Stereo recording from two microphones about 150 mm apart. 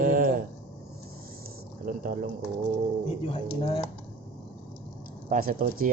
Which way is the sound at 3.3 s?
40° left (ahead or behind).